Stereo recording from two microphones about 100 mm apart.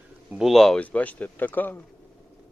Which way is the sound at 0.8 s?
15° left (ahead or behind).